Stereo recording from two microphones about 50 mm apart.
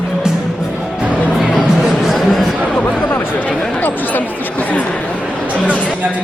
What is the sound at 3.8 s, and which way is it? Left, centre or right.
Chatter, left.